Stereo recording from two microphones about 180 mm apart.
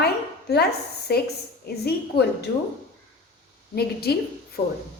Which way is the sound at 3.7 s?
60° left (ahead or behind).